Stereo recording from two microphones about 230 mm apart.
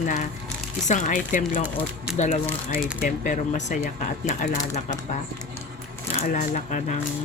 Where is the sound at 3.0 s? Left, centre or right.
Left.